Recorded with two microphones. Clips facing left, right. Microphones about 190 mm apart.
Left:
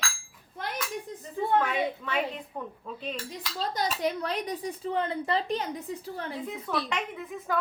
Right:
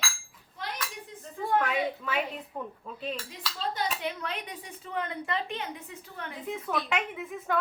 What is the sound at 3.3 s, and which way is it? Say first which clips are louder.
Speech: left 2 dB; 40° left (ahead or behind).